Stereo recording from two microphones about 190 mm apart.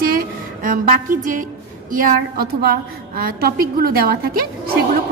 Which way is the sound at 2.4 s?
50° right (ahead or behind).